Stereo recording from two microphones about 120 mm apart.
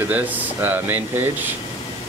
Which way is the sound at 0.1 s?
15° right (ahead or behind).